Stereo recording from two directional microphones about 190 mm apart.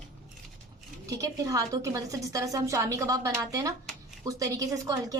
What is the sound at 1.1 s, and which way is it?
A woman's voice, 20° right (ahead or behind).